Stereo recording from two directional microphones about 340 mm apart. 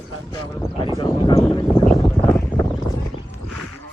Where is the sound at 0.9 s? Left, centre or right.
Centre.